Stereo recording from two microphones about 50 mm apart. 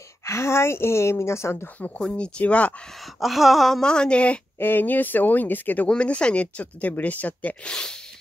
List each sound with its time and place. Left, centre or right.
0.2 s speech: left
2.0 s speech: centre
3.2 s a sound: centre
3.8 s speech: centre
4.6 s speech: left
5.9 s speech: left
7.6 s speech: centre